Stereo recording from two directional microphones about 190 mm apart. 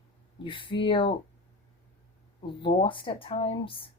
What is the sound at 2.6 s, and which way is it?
Speech, 25° left (ahead or behind).